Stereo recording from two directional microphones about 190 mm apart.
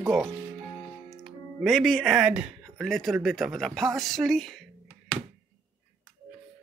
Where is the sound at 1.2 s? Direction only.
Centre (ahead or behind).